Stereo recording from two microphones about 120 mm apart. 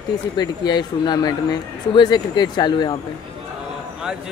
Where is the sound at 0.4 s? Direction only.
35° left (ahead or behind).